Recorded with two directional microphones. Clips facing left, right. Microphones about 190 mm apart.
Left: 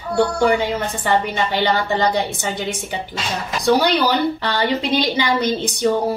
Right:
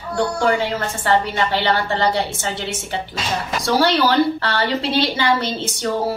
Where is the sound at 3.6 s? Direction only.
15° left (ahead or behind).